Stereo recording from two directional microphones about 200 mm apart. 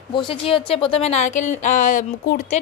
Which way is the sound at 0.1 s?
25° left (ahead or behind).